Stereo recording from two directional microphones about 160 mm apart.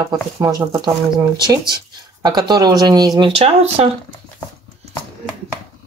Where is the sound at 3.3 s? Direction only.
40° right (ahead or behind).